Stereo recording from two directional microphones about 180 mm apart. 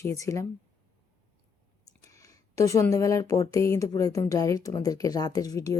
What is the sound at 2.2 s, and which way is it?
Speech, 15° left (ahead or behind).